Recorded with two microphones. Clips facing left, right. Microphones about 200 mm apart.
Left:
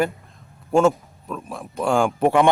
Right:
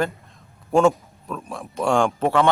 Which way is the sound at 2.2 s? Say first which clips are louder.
Left 2 dB; 15° left (ahead or behind).